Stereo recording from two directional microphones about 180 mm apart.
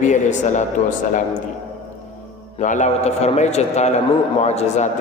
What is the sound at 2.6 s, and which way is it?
A man's voice, 45° left (ahead or behind).